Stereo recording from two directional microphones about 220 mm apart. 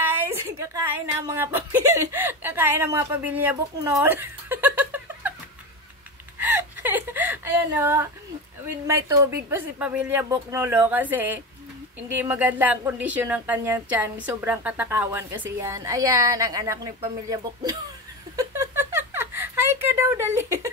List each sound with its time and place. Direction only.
0.0 s speech: 10° right (ahead or behind)
6.4 s whimper: 10° right (ahead or behind)
8.6 s speech: 10° right (ahead or behind)
18.3 s a sound: 15° right (ahead or behind)